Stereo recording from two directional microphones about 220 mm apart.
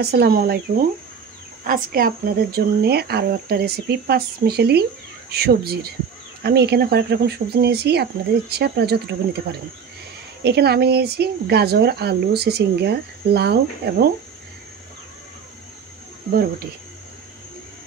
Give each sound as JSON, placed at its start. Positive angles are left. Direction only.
{"t": 0.0, "sound": "speech", "side_deg": -45}
{"t": 1.6, "sound": "speech", "side_deg": -40}
{"t": 10.4, "sound": "speech", "side_deg": -45}